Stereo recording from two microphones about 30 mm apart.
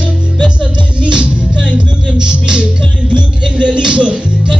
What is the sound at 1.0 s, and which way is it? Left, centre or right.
Music, right.